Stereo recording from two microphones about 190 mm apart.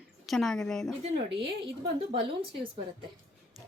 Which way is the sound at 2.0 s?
25° right (ahead or behind).